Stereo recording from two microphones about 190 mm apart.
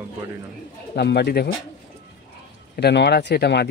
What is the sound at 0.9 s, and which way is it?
Speech, 60° left (ahead or behind).